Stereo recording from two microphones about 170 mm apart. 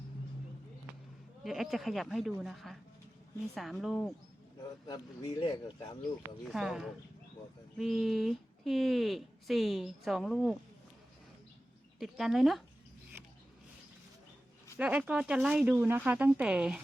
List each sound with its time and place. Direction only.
1.5 s speech: centre (ahead or behind)
5.4 s speech: 30° left (ahead or behind)
6.4 s speech: centre (ahead or behind)
11.9 s speech: centre (ahead or behind)
14.8 s speech: 10° right (ahead or behind)